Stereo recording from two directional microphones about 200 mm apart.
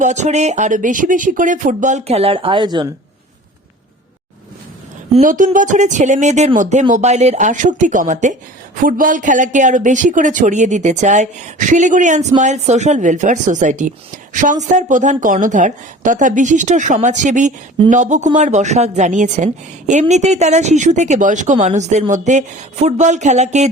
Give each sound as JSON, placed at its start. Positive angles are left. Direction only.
{"t": 0.0, "sound": "speech", "side_deg": -35}
{"t": 5.1, "sound": "speech", "side_deg": -40}